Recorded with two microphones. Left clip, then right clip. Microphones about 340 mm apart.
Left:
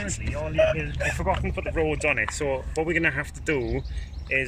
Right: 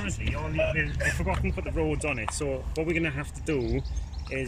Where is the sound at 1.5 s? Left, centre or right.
Left.